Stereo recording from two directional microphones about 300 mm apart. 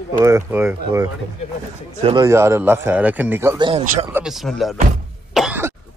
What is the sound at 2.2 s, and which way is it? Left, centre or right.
A man's voice, centre.